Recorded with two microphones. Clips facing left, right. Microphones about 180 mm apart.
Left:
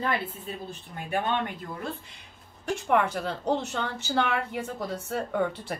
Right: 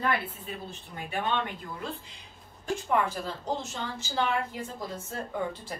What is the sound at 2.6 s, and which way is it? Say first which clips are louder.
A woman's voice: left 3 dB; 70° left (ahead or behind).